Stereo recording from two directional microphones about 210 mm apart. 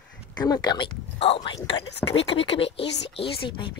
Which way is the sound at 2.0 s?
5° left (ahead or behind).